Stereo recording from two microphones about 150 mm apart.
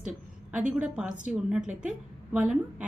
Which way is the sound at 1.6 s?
60° right (ahead or behind).